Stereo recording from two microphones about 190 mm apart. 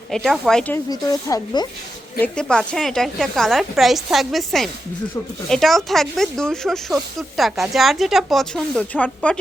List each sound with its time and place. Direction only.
0.1 s a woman's voice: centre (ahead or behind)
0.9 s speech: 20° left (ahead or behind)
2.1 s a woman's voice: 5° left (ahead or behind)